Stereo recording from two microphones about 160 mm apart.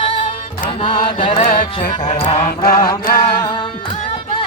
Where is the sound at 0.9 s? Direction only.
35° left (ahead or behind).